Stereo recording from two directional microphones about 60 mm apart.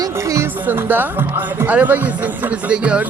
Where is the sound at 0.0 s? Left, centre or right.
Right.